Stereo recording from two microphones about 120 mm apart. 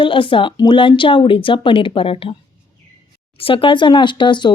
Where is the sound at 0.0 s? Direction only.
45° left (ahead or behind).